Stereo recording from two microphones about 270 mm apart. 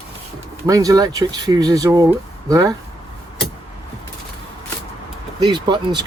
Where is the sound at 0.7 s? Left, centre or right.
Centre.